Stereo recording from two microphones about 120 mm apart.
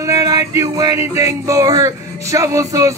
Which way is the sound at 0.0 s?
30° right (ahead or behind).